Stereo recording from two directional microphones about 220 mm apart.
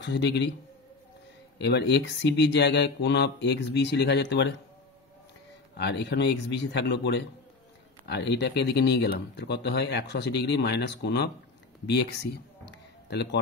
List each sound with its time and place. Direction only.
0.0 s speech: 50° left (ahead or behind)
1.6 s speech: 50° left (ahead or behind)
5.8 s speech: 50° left (ahead or behind)